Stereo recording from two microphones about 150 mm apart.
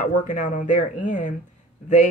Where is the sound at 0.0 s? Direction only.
55° left (ahead or behind).